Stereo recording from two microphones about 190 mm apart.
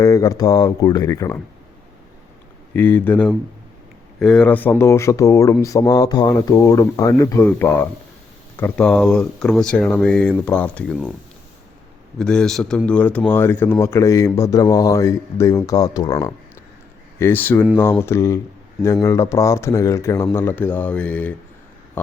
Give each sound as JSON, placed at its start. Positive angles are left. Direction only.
{"t": 0.0, "sound": "speech", "side_deg": 20}
{"t": 2.7, "sound": "speech", "side_deg": 10}
{"t": 12.2, "sound": "speech", "side_deg": 5}
{"t": 17.2, "sound": "speech", "side_deg": 10}